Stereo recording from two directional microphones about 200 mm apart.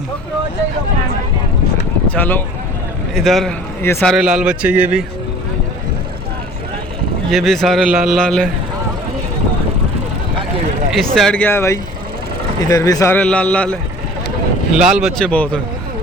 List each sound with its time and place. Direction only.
2.0 s speech: 10° left (ahead or behind); by 5.0 s 5° right (ahead or behind)
7.3 s speech: centre (ahead or behind)
10.9 s a man's voice: centre (ahead or behind)
14.8 s speech: 5° right (ahead or behind)